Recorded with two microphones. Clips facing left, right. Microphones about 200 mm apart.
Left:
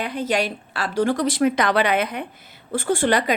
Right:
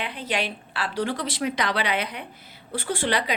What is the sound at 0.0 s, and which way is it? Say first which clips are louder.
A woman's voice: left 6 dB; 45° left (ahead or behind).